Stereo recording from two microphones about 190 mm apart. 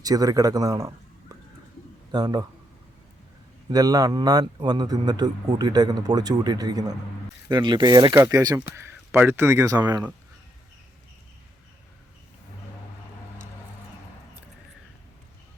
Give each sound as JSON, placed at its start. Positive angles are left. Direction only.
{"t": 0.0, "sound": "a man's voice", "side_deg": -20}
{"t": 1.3, "sound": "a sound", "side_deg": -20}
{"t": 2.1, "sound": "a man's voice", "side_deg": -20}
{"t": 3.7, "sound": "a man's voice", "side_deg": -20}